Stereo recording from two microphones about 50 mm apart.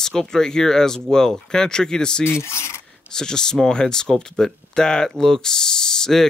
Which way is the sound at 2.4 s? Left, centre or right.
Left.